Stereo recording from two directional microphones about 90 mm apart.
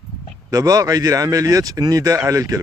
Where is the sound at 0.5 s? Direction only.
40° right (ahead or behind).